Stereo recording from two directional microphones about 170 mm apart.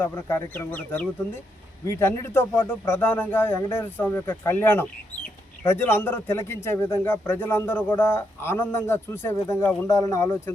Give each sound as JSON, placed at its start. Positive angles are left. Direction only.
{"t": 0.0, "sound": "a man's voice", "side_deg": 15}